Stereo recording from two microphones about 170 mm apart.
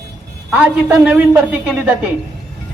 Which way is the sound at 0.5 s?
10° right (ahead or behind).